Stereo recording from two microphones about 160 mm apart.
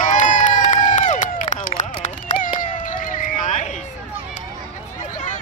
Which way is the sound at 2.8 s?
55° left (ahead or behind).